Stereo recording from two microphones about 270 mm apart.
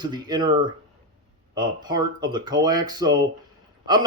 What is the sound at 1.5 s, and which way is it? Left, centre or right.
A man's voice, centre.